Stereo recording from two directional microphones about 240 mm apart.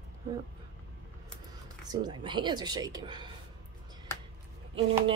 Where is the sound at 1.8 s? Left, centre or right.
Centre.